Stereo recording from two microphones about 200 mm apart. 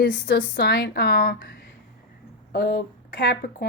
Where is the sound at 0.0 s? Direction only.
50° left (ahead or behind).